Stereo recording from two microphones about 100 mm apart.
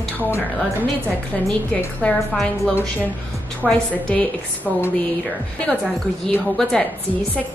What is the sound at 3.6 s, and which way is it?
Speech, centre (ahead or behind).